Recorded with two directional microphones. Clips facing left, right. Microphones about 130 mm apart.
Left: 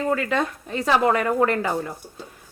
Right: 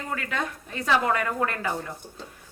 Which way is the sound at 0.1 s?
35° left (ahead or behind).